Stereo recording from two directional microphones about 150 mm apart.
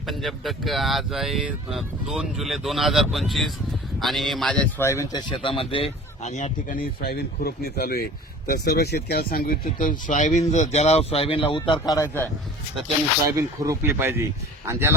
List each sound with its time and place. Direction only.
0.0 s speech: centre (ahead or behind)
4.9 s speech: 20° left (ahead or behind)
5.3 s speech: 35° left (ahead or behind); by 9.6 s 80° left
9.6 s speech: 60° left (ahead or behind); by 11.8 s 35° left (ahead or behind)
11.8 s speech: 20° left (ahead or behind)
12.0 s speech: 20° right (ahead or behind)